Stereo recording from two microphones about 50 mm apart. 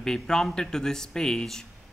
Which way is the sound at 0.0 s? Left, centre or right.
Centre.